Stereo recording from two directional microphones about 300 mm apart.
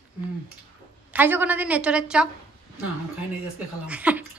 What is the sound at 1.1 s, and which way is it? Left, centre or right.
A woman's voice, centre.